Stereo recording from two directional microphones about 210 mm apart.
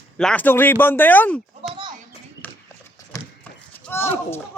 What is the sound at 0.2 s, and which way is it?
Speech, 5° left (ahead or behind).